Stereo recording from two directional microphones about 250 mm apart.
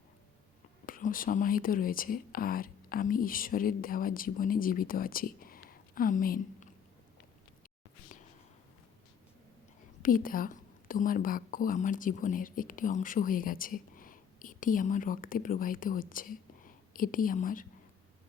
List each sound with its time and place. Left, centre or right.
0.9 s speech: left
10.0 s a woman's voice: left